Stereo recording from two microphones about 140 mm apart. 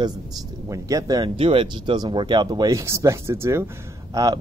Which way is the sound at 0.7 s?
25° right (ahead or behind).